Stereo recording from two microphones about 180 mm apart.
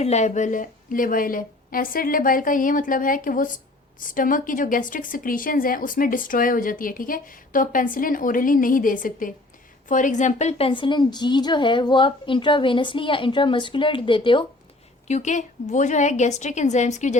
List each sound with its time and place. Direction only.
0.0 s a woman's voice: 40° left (ahead or behind)
15.0 s a woman's voice: 40° left (ahead or behind)